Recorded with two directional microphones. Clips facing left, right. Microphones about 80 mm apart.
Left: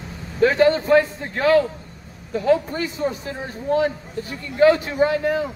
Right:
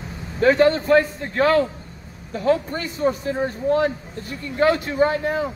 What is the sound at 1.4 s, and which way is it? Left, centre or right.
A man's voice, right.